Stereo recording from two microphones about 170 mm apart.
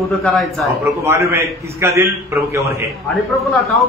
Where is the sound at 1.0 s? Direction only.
15° right (ahead or behind).